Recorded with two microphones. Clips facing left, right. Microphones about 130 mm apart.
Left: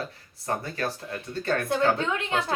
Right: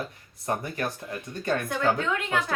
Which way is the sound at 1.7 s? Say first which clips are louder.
Left 3 dB; 25° left (ahead or behind).